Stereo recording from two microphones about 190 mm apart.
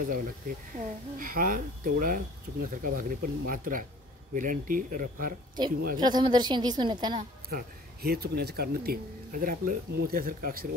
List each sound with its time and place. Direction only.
0.0 s speech: 45° right (ahead or behind)
5.9 s a woman's voice: 20° right (ahead or behind)
7.4 s speech: 55° right (ahead or behind)